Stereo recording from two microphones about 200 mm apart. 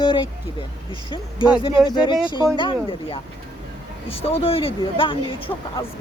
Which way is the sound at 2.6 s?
25° left (ahead or behind).